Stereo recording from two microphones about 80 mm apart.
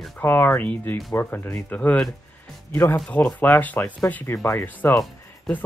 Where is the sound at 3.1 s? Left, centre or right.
Left.